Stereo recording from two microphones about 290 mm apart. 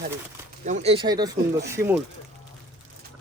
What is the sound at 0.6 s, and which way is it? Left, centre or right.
Speech, right.